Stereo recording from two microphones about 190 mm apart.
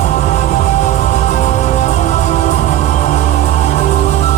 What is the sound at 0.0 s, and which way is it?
Music, 35° left (ahead or behind).